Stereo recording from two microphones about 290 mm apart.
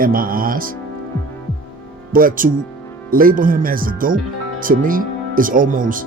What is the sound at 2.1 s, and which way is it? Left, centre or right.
Speech, right.